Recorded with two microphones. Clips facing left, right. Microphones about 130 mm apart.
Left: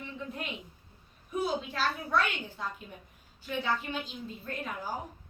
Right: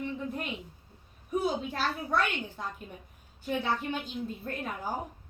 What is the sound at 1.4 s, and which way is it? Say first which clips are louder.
A woman's voice: right 1 dB; 50° right (ahead or behind).